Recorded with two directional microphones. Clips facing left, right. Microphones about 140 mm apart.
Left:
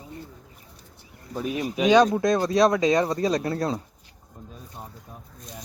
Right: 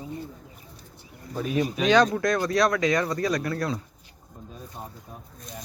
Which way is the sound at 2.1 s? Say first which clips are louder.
Left 2 dB; 25° left (ahead or behind).